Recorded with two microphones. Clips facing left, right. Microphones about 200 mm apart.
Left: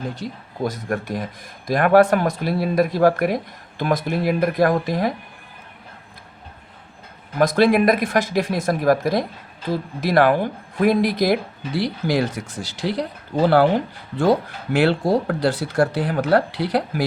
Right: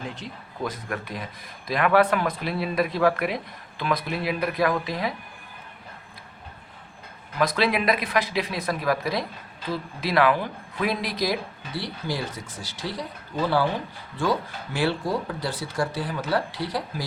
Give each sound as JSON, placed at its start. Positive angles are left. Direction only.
{"t": 0.2, "sound": "speech", "side_deg": 40}
{"t": 7.3, "sound": "speech", "side_deg": 50}
{"t": 11.7, "sound": "speech", "side_deg": 80}